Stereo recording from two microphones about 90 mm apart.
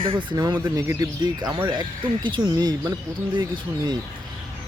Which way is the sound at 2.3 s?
55° right (ahead or behind).